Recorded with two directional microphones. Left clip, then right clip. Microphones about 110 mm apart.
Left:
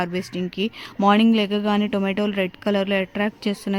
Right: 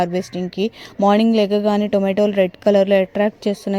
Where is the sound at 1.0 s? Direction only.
Centre (ahead or behind).